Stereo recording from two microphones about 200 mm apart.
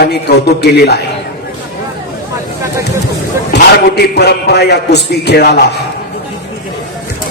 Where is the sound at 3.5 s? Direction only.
50° left (ahead or behind).